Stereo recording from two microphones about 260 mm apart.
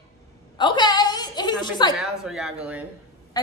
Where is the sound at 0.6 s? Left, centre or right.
Centre.